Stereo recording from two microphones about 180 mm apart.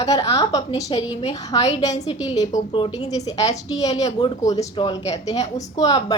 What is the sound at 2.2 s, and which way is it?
Speech, 20° left (ahead or behind).